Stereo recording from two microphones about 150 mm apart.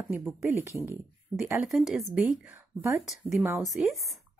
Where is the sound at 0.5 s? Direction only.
15° right (ahead or behind).